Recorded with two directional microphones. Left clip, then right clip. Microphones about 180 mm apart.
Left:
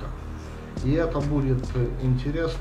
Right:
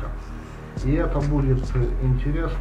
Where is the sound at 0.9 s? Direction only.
10° left (ahead or behind).